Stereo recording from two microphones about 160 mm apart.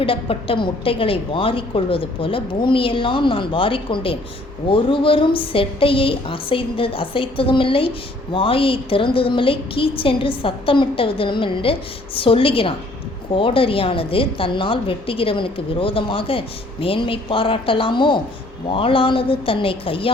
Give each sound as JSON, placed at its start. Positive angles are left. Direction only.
{"t": 0.0, "sound": "a woman's voice", "side_deg": 35}